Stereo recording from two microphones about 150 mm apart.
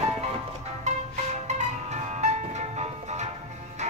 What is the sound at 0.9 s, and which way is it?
Music, 50° right (ahead or behind).